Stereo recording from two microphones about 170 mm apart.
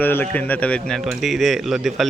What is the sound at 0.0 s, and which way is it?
A man's voice, 10° left (ahead or behind).